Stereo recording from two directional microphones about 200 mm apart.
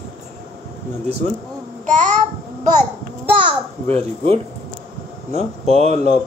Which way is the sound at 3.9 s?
30° right (ahead or behind).